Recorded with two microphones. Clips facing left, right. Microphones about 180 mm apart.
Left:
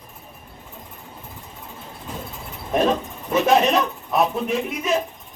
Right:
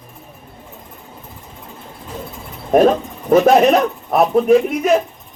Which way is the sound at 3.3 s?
50° right (ahead or behind).